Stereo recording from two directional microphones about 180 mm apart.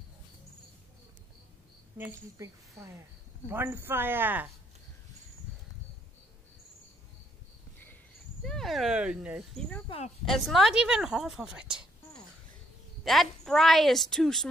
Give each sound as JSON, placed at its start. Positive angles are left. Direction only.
{"t": 2.3, "sound": "speech", "side_deg": -15}
{"t": 8.5, "sound": "a woman's voice", "side_deg": 0}
{"t": 9.8, "sound": "speech", "side_deg": 35}
{"t": 10.2, "sound": "a woman's voice", "side_deg": 0}
{"t": 13.0, "sound": "a woman's voice", "side_deg": 0}